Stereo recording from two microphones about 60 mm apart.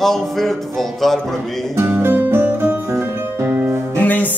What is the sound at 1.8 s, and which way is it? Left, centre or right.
Music, right.